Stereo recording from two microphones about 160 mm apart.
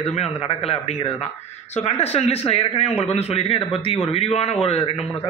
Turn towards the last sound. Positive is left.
turn(degrees=40)  # may be behind; listen again after turning